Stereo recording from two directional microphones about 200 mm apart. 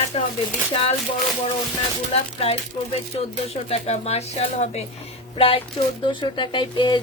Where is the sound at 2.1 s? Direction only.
30° left (ahead or behind).